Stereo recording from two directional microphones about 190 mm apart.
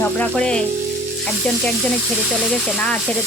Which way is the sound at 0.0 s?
5° left (ahead or behind).